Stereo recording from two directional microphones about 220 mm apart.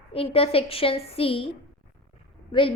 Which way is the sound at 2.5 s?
20° left (ahead or behind).